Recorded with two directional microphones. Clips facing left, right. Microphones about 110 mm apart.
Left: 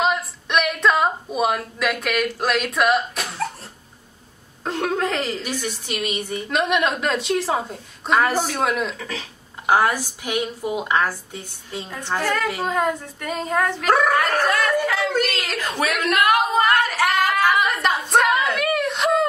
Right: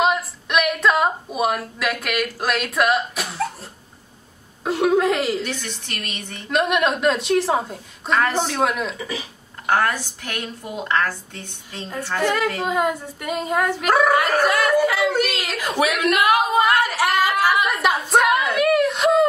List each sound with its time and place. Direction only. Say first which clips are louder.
0.0 s a sound: right 2 dB; centre (ahead or behind)
4.6 s speech: right 5 dB; 5° right (ahead or behind)
5.4 s a woman's voice: left 1 dB; 10° left (ahead or behind)
6.5 s a woman's voice: right 2 dB; centre (ahead or behind)
9.7 s a woman's voice: left 2 dB; 10° left (ahead or behind)
12.6 s speech: right 1 dB; 10° right (ahead or behind)
16.1 s female singing: left 1 dB; 5° right (ahead or behind)